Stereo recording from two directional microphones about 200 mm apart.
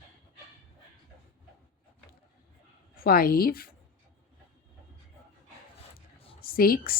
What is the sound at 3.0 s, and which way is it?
Speech, 45° left (ahead or behind).